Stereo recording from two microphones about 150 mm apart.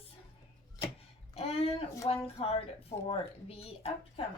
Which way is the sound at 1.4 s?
40° left (ahead or behind).